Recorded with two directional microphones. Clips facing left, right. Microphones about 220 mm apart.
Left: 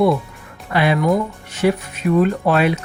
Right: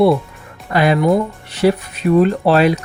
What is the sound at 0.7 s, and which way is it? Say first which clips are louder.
Speech: right 3 dB; 40° right (ahead or behind).